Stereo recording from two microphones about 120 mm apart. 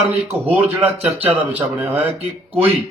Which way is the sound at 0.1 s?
15° right (ahead or behind).